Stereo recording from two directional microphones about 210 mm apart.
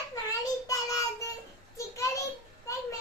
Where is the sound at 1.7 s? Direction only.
15° left (ahead or behind).